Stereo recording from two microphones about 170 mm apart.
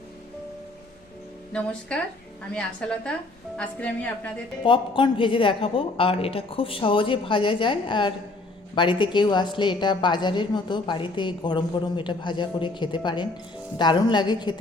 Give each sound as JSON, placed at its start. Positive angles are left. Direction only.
{"t": 1.9, "sound": "a woman's voice", "side_deg": 5}
{"t": 4.6, "sound": "a woman's voice", "side_deg": 30}